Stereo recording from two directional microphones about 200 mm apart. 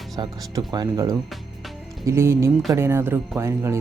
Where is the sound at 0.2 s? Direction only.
20° right (ahead or behind).